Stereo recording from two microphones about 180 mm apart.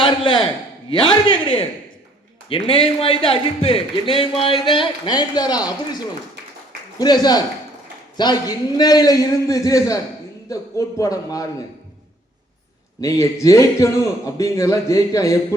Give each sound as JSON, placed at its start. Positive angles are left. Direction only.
{"t": 0.0, "sound": "a man's voice", "side_deg": 25}
{"t": 7.0, "sound": "a man's voice", "side_deg": 20}
{"t": 13.0, "sound": "a man's voice", "side_deg": 20}